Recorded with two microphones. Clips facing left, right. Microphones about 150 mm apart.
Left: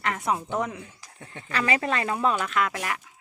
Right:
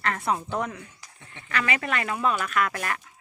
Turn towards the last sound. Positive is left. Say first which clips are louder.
# even
turn(degrees=15)  # may be behind; listen again after turning